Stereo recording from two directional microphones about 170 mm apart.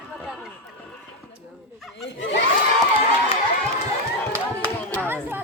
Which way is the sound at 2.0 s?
90° left.